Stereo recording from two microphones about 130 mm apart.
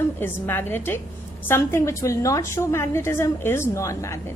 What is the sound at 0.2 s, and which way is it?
A woman's voice, 15° left (ahead or behind).